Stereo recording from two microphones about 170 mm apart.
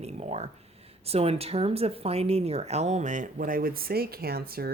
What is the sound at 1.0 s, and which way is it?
Speech, 35° right (ahead or behind).